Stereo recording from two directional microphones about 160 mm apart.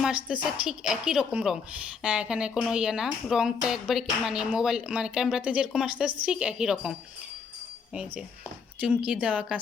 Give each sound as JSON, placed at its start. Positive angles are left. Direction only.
{"t": 0.6, "sound": "speech", "side_deg": -5}
{"t": 8.8, "sound": "speech", "side_deg": -10}